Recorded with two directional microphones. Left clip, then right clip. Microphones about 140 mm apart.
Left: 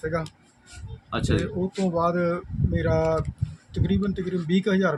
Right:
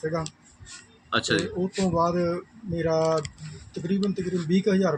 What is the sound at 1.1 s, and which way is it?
Speech, 5° left (ahead or behind).